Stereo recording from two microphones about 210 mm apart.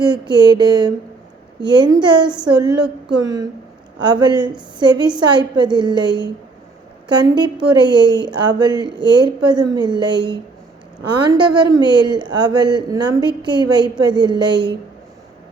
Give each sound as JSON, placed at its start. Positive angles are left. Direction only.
{"t": 0.0, "sound": "a woman's voice", "side_deg": -20}